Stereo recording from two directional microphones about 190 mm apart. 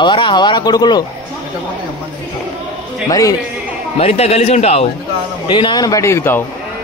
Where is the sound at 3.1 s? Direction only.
20° left (ahead or behind).